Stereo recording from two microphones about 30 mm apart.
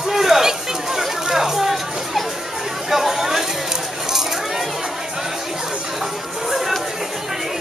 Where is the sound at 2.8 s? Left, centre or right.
Centre.